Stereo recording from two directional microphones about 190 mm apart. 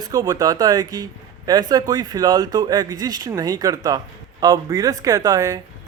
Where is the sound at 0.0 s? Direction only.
20° right (ahead or behind).